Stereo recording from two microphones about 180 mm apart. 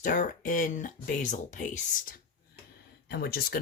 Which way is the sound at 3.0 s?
65° left (ahead or behind).